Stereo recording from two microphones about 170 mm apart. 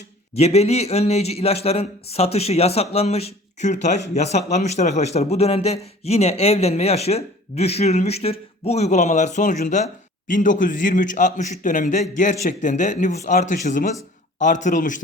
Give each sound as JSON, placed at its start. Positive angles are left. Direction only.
{"t": 0.3, "sound": "a man's voice", "side_deg": 40}